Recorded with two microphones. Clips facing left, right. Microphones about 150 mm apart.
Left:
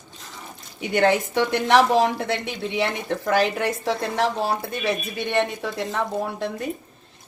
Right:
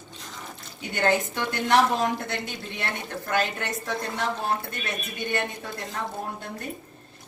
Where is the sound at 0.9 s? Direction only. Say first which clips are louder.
Left 5 dB; 75° left (ahead or behind).